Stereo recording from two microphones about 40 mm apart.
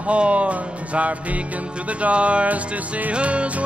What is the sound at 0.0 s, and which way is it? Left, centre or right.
Music, right.